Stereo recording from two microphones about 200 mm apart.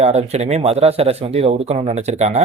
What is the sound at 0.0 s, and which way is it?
Speech, 35° right (ahead or behind).